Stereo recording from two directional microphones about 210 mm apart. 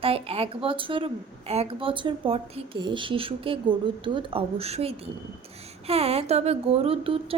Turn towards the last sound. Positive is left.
turn(degrees=-25)  # may be behind; listen again after turning